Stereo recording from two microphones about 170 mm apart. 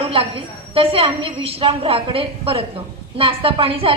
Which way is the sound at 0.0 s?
35° right (ahead or behind).